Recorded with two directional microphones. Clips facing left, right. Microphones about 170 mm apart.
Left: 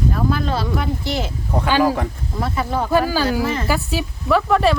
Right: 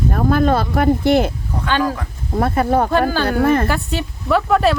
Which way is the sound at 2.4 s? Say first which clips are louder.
Right 6 dB; 55° right (ahead or behind).